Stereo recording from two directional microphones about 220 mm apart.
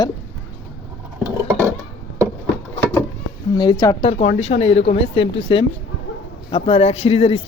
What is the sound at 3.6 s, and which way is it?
Speech, 20° left (ahead or behind).